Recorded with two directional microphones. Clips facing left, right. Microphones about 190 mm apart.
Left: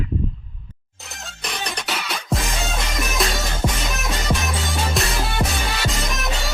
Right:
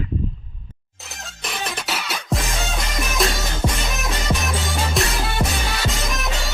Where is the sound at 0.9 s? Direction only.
Centre (ahead or behind).